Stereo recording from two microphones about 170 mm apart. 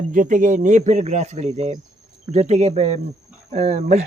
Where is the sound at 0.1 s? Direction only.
50° right (ahead or behind).